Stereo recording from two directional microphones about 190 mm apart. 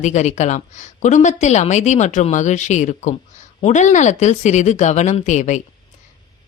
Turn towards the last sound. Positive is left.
turn(degrees=40)  # may be behind; listen again after turning